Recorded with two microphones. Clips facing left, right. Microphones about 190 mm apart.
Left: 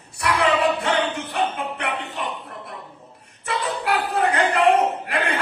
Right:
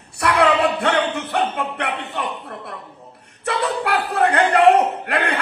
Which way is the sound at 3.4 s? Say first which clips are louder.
Right 3 dB; 65° right (ahead or behind).